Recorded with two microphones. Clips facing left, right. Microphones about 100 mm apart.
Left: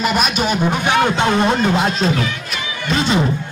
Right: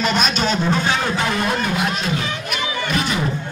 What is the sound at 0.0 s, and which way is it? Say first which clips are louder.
Speech: left 2 dB; 5° left (ahead or behind).